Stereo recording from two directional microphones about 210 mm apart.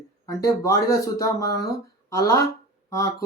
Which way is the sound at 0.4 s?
15° left (ahead or behind).